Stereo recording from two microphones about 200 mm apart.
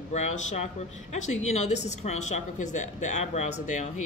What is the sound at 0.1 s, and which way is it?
A woman's voice, 35° left (ahead or behind).